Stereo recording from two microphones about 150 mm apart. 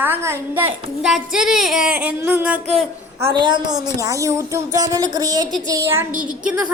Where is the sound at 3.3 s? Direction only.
30° right (ahead or behind).